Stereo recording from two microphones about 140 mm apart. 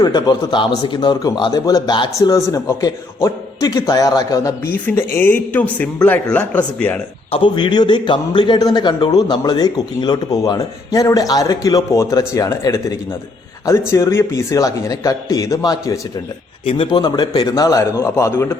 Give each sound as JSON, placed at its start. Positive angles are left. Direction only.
{"t": 0.0, "sound": "a man's voice", "side_deg": 30}
{"t": 4.7, "sound": "a man's voice", "side_deg": 15}
{"t": 7.3, "sound": "a man's voice", "side_deg": 40}
{"t": 16.6, "sound": "a man's voice", "side_deg": 40}